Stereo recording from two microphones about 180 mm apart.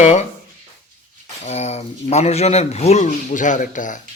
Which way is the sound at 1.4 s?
35° left (ahead or behind).